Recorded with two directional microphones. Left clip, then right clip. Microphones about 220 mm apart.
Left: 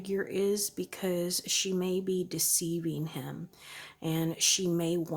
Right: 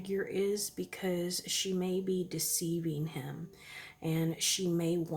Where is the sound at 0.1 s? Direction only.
30° left (ahead or behind).